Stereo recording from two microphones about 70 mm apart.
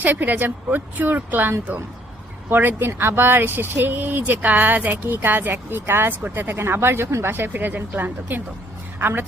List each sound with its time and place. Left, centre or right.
0.0 s a woman's voice: right